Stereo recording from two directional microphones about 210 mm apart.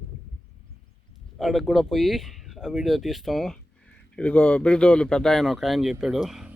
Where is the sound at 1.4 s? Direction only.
Centre (ahead or behind).